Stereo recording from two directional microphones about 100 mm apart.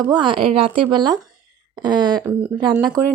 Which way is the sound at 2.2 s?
15° right (ahead or behind).